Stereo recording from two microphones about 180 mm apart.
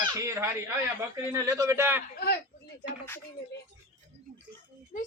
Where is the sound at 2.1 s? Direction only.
60° left (ahead or behind).